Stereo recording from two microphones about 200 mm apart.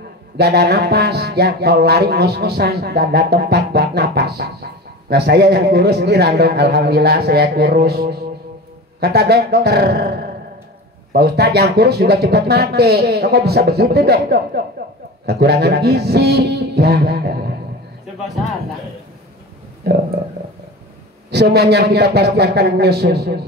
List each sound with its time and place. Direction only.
0.4 s music: 55° right (ahead or behind)
21.3 s music: 55° right (ahead or behind)